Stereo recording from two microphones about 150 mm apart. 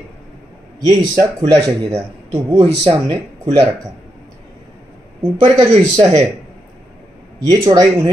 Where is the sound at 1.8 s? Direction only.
40° right (ahead or behind).